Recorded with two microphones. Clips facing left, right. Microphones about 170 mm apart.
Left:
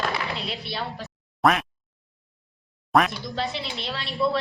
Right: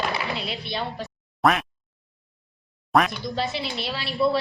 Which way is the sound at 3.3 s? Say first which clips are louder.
Right 2 dB; 5° right (ahead or behind).